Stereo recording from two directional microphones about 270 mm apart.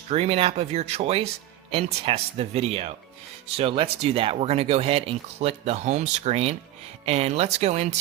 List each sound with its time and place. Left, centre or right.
0.1 s speech: right